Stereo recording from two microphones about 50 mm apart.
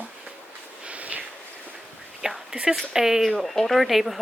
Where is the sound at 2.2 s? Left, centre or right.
Centre.